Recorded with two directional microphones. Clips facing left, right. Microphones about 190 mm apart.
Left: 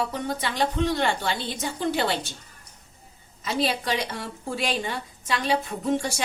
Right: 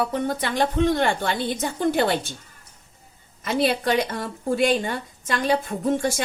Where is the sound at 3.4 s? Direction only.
55° right (ahead or behind).